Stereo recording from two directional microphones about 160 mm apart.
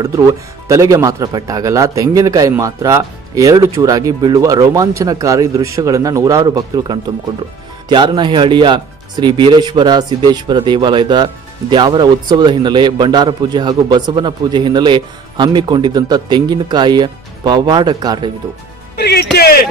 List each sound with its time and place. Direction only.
0.7 s speech: 20° right (ahead or behind)
18.9 s music: 90° left
19.3 s speech: 75° left (ahead or behind)